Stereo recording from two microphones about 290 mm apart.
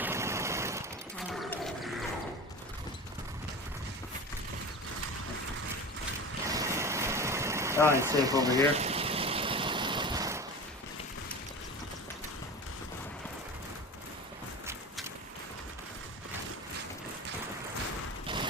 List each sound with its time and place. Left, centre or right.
0.0 s machine gun: centre
1.3 s wild animals: centre
6.5 s vehicle: centre
18.3 s a sound: centre